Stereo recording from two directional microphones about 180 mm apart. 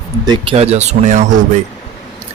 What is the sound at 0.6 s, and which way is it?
Speech, 35° right (ahead or behind).